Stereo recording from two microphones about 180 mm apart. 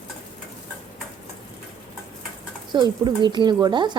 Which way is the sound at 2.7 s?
25° right (ahead or behind).